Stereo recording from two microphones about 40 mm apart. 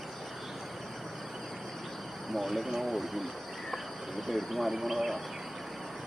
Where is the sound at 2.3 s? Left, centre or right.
Centre.